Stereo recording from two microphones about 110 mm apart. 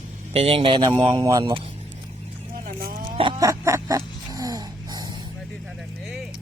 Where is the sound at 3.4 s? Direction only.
30° right (ahead or behind).